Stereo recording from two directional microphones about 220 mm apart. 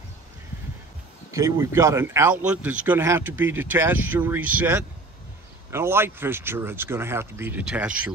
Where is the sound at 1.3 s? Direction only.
15° right (ahead or behind).